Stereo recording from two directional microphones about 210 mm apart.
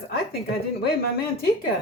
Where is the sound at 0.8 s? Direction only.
50° left (ahead or behind).